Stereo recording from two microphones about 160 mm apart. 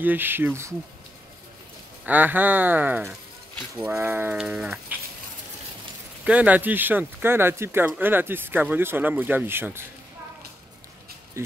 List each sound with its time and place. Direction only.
0.0 s speech: 10° right (ahead or behind)
2.0 s speech: 10° right (ahead or behind)
3.7 s speech: 15° right (ahead or behind)
6.2 s speech: 10° right (ahead or behind)
11.4 s a sound: 15° right (ahead or behind)